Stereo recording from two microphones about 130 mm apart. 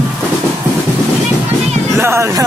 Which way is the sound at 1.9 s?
20° right (ahead or behind).